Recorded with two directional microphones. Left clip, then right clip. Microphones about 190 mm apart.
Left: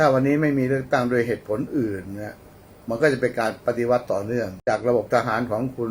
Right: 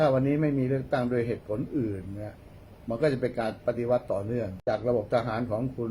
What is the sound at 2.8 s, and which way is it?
A man's voice, 15° left (ahead or behind).